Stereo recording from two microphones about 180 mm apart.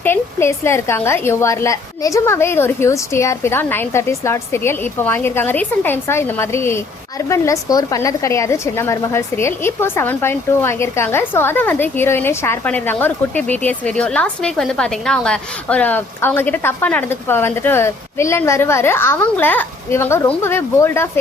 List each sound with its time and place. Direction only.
0.0 s a woman's voice: 10° left (ahead or behind)